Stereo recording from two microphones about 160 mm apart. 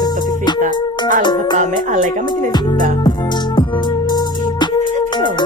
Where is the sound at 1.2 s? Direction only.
25° left (ahead or behind).